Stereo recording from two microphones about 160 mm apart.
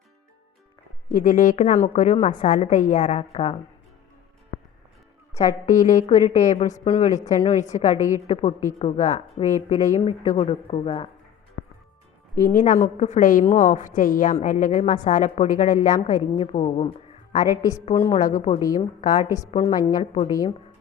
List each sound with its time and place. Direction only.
1.1 s a woman's voice: 60° left (ahead or behind); by 3.6 s 40° left (ahead or behind)
5.3 s a woman's voice: 20° left (ahead or behind)
5.6 s a woman's voice: 50° left (ahead or behind); by 11.1 s 35° left (ahead or behind)
11.6 s music: 90° left
12.4 s a woman's voice: 60° left (ahead or behind)
17.3 s a woman's voice: 20° left (ahead or behind)